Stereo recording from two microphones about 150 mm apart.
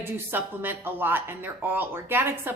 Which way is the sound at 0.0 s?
15° right (ahead or behind).